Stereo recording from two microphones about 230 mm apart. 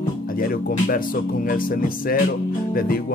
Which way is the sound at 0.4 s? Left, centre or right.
Left.